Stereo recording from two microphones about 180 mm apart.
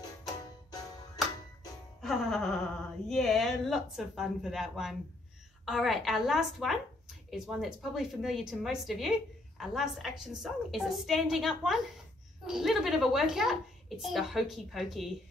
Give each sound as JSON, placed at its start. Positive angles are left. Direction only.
{"t": 2.0, "sound": "music", "side_deg": 0}
{"t": 3.1, "sound": "a child's voice", "side_deg": 0}